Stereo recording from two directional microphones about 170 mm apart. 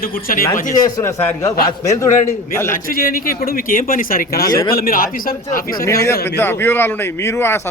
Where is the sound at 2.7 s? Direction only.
55° left (ahead or behind).